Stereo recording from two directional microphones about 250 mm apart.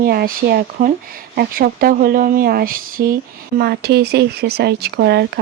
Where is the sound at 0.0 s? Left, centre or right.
Right.